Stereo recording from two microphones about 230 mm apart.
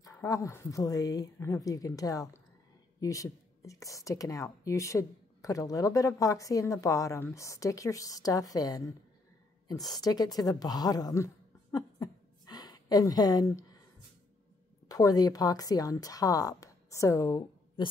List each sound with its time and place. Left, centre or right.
0.0 s a woman's voice: centre
9.9 s a woman's voice: centre
11.7 s a sound: centre
14.9 s a woman's voice: centre